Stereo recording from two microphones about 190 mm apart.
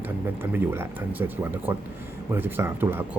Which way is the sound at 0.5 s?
15° right (ahead or behind).